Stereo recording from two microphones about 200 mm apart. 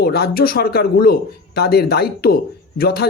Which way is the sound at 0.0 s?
50° left (ahead or behind).